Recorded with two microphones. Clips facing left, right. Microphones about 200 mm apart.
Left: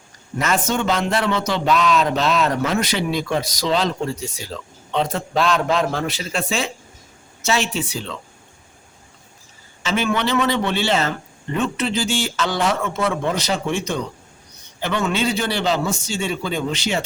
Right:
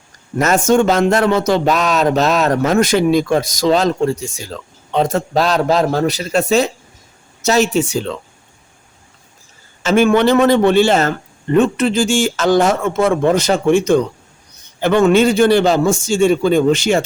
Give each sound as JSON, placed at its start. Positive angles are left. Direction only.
{"t": 0.3, "sound": "speech", "side_deg": -45}
{"t": 9.8, "sound": "speech", "side_deg": -50}